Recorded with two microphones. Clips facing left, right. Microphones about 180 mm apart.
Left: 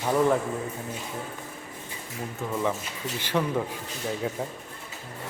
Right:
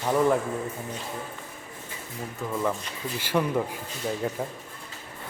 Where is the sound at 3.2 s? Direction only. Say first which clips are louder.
Right 1 dB; 10° right (ahead or behind).